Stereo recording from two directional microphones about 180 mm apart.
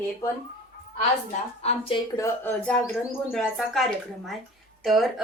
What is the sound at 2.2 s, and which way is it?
A woman's voice, 10° left (ahead or behind).